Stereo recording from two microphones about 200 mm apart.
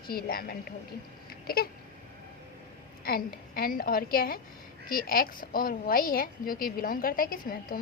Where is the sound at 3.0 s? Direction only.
50° left (ahead or behind).